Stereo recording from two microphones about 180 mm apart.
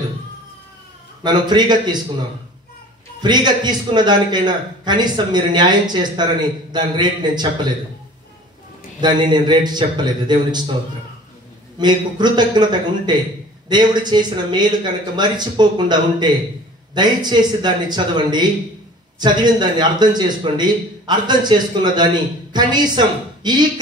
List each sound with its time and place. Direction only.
1.2 s a man's voice: 25° right (ahead or behind)
3.2 s a man's voice: 25° right (ahead or behind)
9.0 s a man's voice: 25° right (ahead or behind)
11.8 s a man's voice: 25° right (ahead or behind)